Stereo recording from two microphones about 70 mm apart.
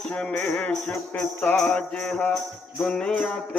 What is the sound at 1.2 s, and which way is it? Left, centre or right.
Music, centre.